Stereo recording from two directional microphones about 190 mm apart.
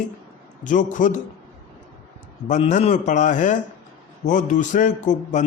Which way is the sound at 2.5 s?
40° left (ahead or behind).